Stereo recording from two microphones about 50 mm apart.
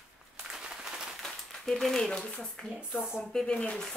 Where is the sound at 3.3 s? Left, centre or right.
Centre.